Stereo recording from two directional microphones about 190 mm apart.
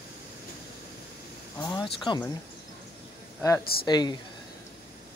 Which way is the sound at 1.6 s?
20° left (ahead or behind).